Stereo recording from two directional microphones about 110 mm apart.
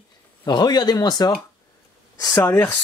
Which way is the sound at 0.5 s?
40° left (ahead or behind).